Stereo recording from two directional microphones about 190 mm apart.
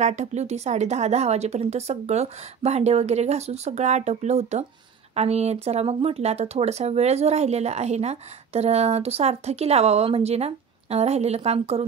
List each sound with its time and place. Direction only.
0.0 s speech: 35° right (ahead or behind)